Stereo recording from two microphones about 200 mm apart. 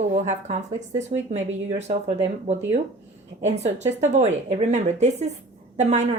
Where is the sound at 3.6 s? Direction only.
35° right (ahead or behind).